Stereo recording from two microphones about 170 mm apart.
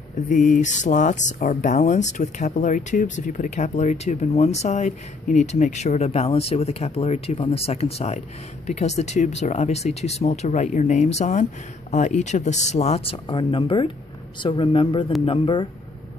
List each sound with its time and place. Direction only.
0.1 s speech: 50° left (ahead or behind); by 15.7 s 30° left (ahead or behind)